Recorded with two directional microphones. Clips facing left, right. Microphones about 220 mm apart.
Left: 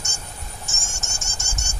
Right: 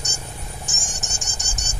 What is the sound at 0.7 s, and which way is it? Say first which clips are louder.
Insect: right 2 dB; 15° right (ahead or behind).